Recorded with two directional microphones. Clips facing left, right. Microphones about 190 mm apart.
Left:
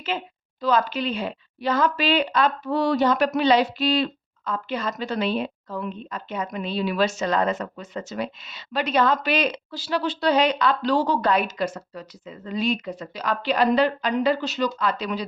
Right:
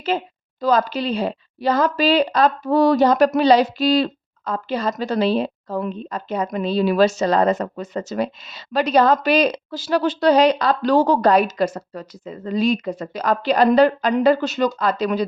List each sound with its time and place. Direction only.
0.1 s a woman's voice: 40° right (ahead or behind)